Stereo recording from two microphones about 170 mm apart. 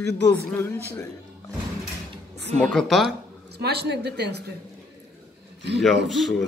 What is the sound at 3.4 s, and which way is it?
Speech, 75° right (ahead or behind).